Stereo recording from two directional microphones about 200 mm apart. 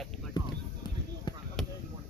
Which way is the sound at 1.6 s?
Centre (ahead or behind).